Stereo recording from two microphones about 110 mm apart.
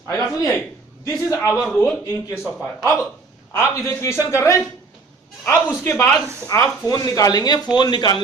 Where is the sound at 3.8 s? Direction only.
25° left (ahead or behind).